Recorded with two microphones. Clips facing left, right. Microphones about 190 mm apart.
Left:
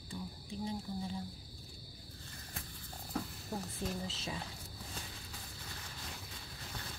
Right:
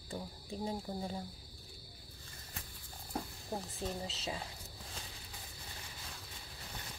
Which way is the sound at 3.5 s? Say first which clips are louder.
Even; 20° right (ahead or behind).